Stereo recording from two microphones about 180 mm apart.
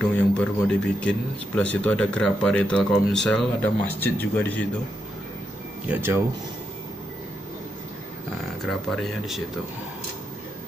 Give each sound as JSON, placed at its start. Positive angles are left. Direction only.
{"t": 0.0, "sound": "speech", "side_deg": 5}
{"t": 5.9, "sound": "speech", "side_deg": -10}
{"t": 8.6, "sound": "speech", "side_deg": 0}